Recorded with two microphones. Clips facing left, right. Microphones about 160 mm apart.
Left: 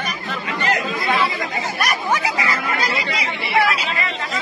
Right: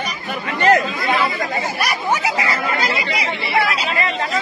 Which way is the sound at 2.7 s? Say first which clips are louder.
Right 2 dB; 25° right (ahead or behind).